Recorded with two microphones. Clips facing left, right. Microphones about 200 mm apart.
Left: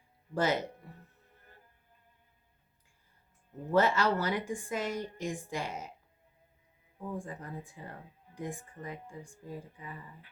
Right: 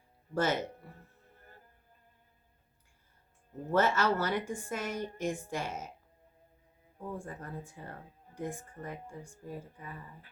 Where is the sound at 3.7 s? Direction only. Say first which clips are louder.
Left 1 dB; 15° left (ahead or behind).